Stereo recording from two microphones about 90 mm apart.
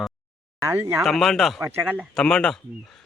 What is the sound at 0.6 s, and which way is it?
Speech, 35° right (ahead or behind).